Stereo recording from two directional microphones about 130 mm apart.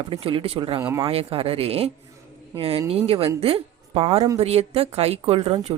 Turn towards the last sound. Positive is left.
turn(degrees=-45)  # may be behind; listen again after turning